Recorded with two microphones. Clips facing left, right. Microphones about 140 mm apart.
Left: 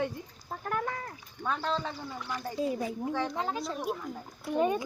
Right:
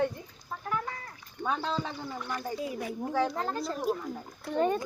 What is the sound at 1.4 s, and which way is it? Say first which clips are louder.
Speech: even; 15° right (ahead or behind).